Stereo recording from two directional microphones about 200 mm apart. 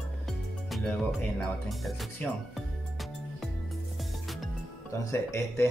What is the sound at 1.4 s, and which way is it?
Speech, 5° left (ahead or behind).